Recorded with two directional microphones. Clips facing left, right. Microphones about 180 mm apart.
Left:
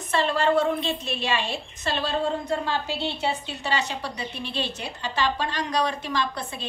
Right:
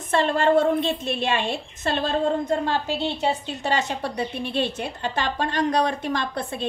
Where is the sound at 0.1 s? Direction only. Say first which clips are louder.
Right 3 dB; 50° right (ahead or behind).